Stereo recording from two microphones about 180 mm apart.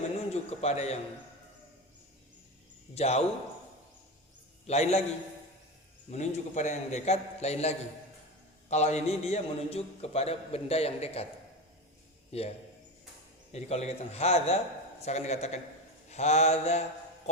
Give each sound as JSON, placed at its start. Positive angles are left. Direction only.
{"t": 0.3, "sound": "a man's voice", "side_deg": 35}
{"t": 2.9, "sound": "a man's voice", "side_deg": 35}
{"t": 4.6, "sound": "a man's voice", "side_deg": 35}
{"t": 6.1, "sound": "a man's voice", "side_deg": 40}
{"t": 12.3, "sound": "a man's voice", "side_deg": 35}